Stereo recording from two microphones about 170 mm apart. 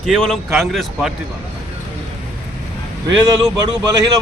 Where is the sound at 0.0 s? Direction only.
5° left (ahead or behind).